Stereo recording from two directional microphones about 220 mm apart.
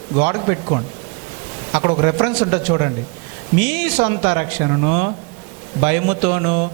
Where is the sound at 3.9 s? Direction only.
25° right (ahead or behind).